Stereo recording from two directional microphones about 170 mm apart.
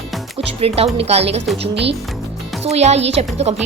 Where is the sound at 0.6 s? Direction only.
35° right (ahead or behind).